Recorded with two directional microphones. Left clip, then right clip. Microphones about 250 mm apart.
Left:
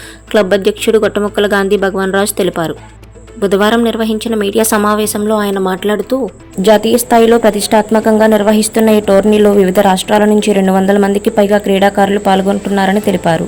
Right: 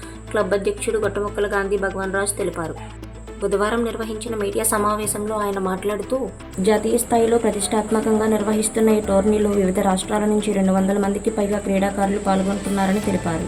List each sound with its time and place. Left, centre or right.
0.3 s speech: left